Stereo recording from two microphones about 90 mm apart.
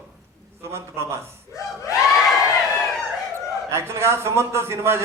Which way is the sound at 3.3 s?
30° right (ahead or behind).